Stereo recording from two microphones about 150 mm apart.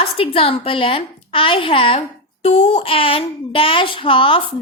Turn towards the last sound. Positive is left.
turn(degrees=35)  # may be behind; listen again after turning